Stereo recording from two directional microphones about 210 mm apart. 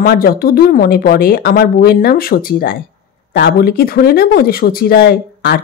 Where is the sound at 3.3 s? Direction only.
55° left (ahead or behind).